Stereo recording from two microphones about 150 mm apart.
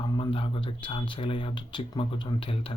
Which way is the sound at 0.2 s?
35° left (ahead or behind).